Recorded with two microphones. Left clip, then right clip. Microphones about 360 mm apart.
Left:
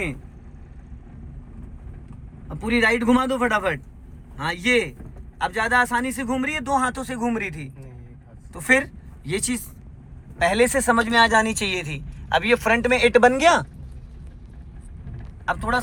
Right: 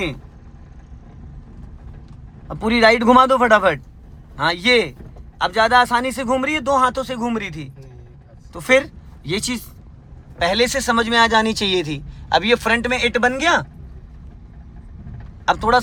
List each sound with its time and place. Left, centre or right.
2.5 s a man's voice: centre
15.4 s a man's voice: centre